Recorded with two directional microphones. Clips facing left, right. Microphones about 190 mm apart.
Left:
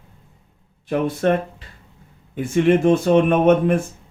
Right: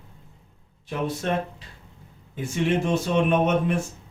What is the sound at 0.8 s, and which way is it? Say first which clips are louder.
Speech: left 8 dB; 55° left (ahead or behind).